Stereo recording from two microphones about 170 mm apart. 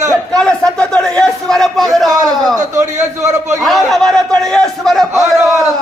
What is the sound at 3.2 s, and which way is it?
Speech, 20° right (ahead or behind).